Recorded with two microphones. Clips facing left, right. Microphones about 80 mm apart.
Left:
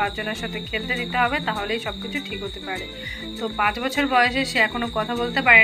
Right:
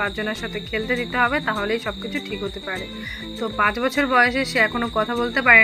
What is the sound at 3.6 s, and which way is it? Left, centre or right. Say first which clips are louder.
Speech: right 2 dB; centre.